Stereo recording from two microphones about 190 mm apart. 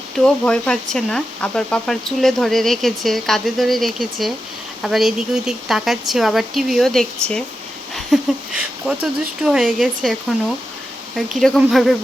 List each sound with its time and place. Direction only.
0.4 s speech: 5° left (ahead or behind)